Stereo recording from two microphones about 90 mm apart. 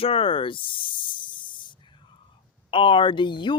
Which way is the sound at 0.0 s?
90° left.